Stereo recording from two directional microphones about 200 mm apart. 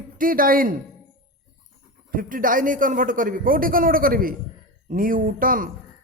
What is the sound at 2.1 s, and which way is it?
Speech, 45° right (ahead or behind).